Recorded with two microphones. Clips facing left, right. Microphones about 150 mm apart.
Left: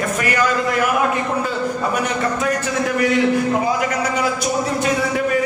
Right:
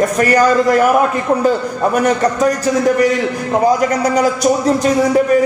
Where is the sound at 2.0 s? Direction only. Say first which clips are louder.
Right 7 dB; 40° right (ahead or behind).